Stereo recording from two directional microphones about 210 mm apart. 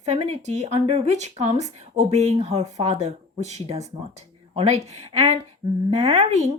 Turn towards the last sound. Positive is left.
turn(degrees=-30)  # may be behind; listen again after turning